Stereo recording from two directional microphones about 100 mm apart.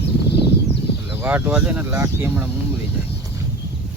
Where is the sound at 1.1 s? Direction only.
20° right (ahead or behind).